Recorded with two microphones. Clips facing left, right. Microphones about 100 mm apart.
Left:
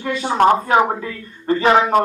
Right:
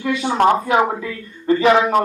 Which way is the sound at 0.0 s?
35° left (ahead or behind).